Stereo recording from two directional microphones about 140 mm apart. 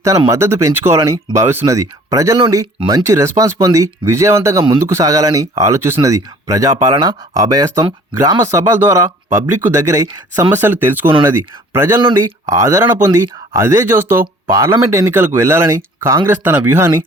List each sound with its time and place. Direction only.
0.3 s speech: 20° right (ahead or behind)
10.5 s speech: 15° right (ahead or behind)
11.9 s speech: 30° right (ahead or behind)